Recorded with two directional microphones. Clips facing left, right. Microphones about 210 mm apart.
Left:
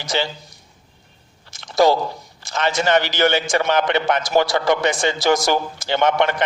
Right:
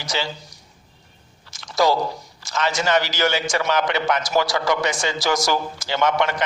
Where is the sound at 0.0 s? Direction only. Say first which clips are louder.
Left 4 dB; 55° left (ahead or behind).